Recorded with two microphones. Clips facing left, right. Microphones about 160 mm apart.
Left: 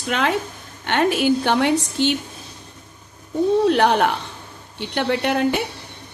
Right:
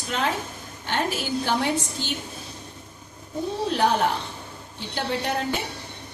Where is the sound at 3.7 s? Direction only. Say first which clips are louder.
Left 5 dB; 70° left (ahead or behind).